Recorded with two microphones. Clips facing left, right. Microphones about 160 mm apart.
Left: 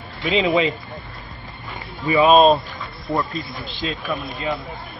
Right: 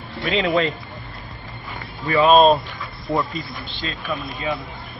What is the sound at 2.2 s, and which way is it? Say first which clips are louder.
Speech: even; centre (ahead or behind).